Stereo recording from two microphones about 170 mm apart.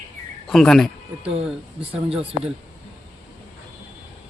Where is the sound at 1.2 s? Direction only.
5° right (ahead or behind).